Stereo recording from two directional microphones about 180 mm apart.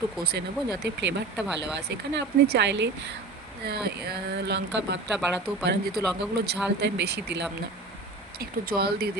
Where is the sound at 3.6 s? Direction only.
65° right (ahead or behind); by 5.0 s 80° right.